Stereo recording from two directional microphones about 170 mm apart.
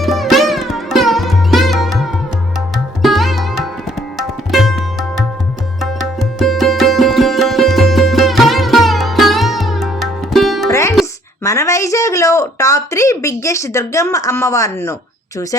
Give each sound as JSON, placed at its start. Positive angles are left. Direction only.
{"t": 0.0, "sound": "music", "side_deg": 0}
{"t": 3.0, "sound": "sitar", "side_deg": 0}
{"t": 4.5, "sound": "music", "side_deg": 0}
{"t": 10.7, "sound": "music", "side_deg": 15}
{"t": 11.4, "sound": "speech", "side_deg": 20}